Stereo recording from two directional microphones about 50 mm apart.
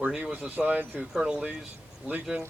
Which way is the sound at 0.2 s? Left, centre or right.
Right.